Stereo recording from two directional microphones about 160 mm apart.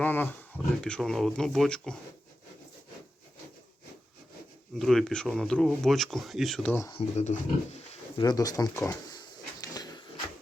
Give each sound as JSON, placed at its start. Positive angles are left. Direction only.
{"t": 0.0, "sound": "speech", "side_deg": 10}
{"t": 4.7, "sound": "speech", "side_deg": 0}
{"t": 6.9, "sound": "speech", "side_deg": 45}
{"t": 8.1, "sound": "a sound", "side_deg": 25}